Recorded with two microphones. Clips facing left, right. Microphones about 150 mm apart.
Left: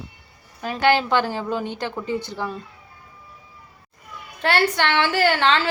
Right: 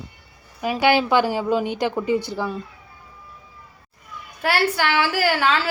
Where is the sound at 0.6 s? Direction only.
10° right (ahead or behind).